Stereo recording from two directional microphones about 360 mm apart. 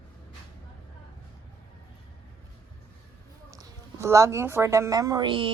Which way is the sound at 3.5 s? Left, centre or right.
Centre.